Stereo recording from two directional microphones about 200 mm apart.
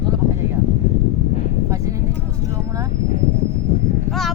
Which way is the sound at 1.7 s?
15° right (ahead or behind).